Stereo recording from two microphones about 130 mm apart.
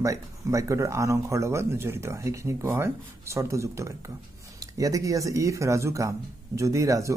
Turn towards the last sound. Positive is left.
turn(degrees=-25)  # may be behind; listen again after turning